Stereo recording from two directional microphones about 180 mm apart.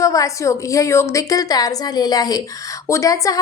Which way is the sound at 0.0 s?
20° left (ahead or behind).